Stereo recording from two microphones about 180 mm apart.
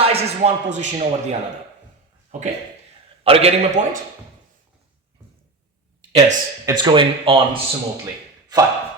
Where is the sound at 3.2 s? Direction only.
35° right (ahead or behind).